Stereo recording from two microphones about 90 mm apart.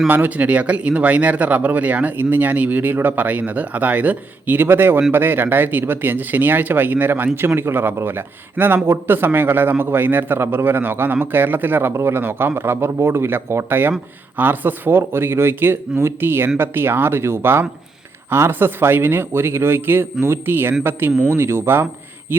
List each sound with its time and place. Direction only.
0.1 s speech: 20° right (ahead or behind)